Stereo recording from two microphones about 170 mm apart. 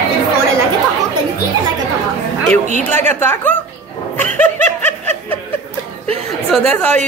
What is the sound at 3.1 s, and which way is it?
Speech, 10° left (ahead or behind).